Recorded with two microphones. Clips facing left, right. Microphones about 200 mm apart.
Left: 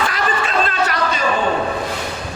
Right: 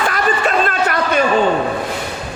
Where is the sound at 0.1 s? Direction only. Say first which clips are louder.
Right 4 dB; 50° right (ahead or behind).